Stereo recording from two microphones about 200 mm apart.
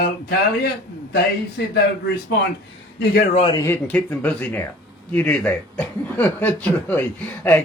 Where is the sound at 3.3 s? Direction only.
30° left (ahead or behind).